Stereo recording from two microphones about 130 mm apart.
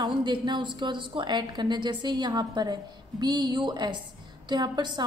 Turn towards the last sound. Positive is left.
turn(degrees=-35)  # may be behind; listen again after turning